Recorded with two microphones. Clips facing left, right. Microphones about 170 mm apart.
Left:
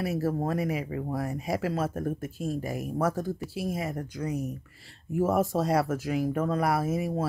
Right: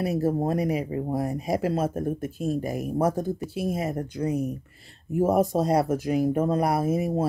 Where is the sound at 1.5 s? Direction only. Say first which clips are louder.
Right 4 dB; 20° right (ahead or behind).